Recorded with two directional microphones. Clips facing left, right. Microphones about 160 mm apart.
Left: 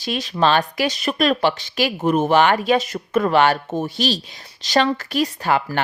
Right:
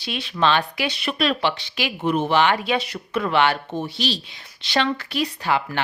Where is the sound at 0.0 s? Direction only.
40° left (ahead or behind).